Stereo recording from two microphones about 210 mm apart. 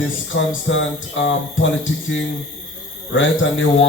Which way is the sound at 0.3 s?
65° left (ahead or behind).